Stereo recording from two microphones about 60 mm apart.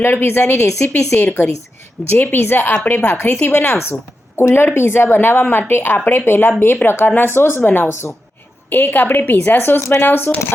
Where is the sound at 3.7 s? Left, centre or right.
Left.